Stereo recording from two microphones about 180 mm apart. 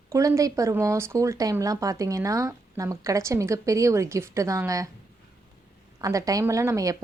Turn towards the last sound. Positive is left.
turn(degrees=-20)  # may be behind; listen again after turning